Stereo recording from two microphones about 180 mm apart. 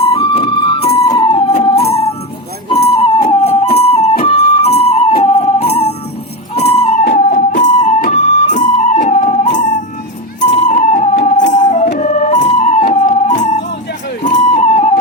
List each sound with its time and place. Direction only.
0.0 s music: 30° left (ahead or behind)
7.0 s music: 65° left (ahead or behind)
7.6 s music: 40° left (ahead or behind)
14.3 s a sound: 40° left (ahead or behind)